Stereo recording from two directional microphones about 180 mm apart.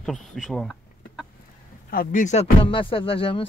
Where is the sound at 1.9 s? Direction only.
50° left (ahead or behind).